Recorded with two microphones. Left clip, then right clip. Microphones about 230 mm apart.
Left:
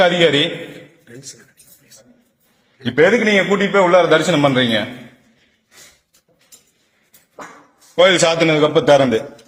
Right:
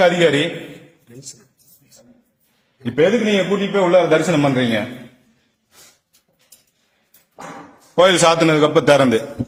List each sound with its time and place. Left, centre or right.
0.0 s a man's voice: centre
2.8 s a man's voice: centre
7.9 s a man's voice: centre